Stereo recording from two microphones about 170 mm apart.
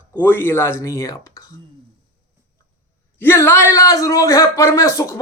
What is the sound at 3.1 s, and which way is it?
A man's voice, 15° left (ahead or behind).